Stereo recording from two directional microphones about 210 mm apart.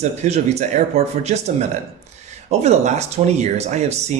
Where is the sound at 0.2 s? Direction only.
30° right (ahead or behind).